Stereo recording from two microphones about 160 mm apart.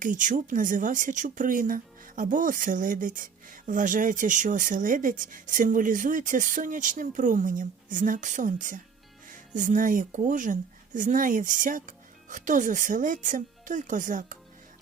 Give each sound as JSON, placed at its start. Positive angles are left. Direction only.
{"t": 0.0, "sound": "speech", "side_deg": -55}